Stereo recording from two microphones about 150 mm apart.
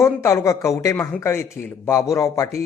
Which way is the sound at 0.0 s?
20° left (ahead or behind).